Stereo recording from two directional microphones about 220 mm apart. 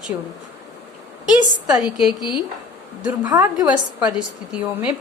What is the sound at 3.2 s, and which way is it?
Speech, 15° right (ahead or behind).